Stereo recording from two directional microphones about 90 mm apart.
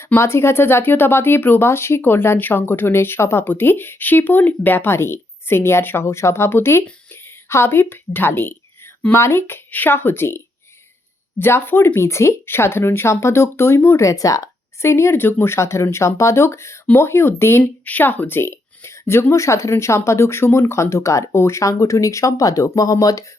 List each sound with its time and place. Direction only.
0.0 s speech: 30° left (ahead or behind)